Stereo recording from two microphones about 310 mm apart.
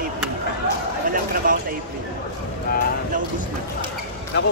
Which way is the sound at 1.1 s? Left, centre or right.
Right.